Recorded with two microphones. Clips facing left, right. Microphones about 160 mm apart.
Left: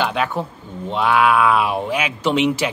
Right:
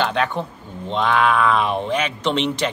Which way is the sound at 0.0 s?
5° left (ahead or behind).